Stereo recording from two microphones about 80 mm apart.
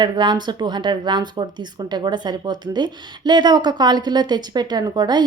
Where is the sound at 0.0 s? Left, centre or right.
Right.